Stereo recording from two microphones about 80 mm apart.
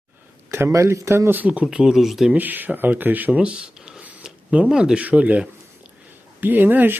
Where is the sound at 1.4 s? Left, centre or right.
Centre.